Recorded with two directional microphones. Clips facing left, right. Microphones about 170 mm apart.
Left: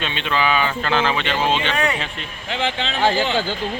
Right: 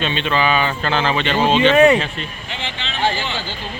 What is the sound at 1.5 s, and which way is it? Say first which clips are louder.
Speech: right 10 dB; 20° right (ahead or behind).